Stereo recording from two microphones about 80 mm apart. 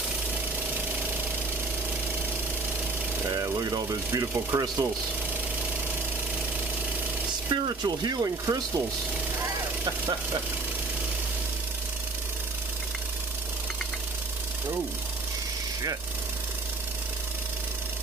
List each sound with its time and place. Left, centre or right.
3.3 s speech: right
7.4 s speech: right